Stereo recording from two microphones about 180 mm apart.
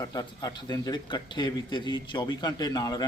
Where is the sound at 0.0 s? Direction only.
20° left (ahead or behind).